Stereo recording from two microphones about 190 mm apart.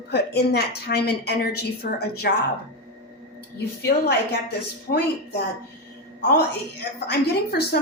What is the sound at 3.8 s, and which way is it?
A woman's voice, 60° left (ahead or behind).